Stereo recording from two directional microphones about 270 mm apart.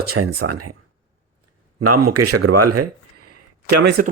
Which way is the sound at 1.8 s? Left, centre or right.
Right.